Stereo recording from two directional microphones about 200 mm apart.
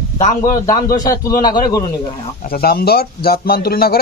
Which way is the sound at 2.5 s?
50° left (ahead or behind).